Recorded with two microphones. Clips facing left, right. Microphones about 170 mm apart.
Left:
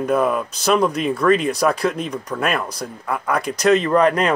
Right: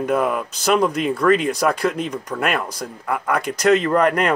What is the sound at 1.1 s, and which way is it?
Speech, 25° left (ahead or behind).